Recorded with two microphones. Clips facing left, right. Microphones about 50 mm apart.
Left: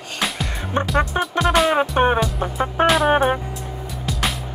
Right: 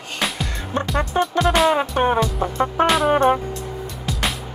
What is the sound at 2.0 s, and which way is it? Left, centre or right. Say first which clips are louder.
Music: left 3 dB; left.